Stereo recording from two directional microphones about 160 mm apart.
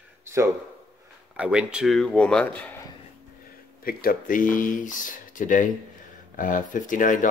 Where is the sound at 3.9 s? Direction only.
65° left (ahead or behind).